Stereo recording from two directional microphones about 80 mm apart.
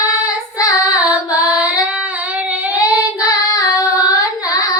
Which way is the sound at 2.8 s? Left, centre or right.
Left.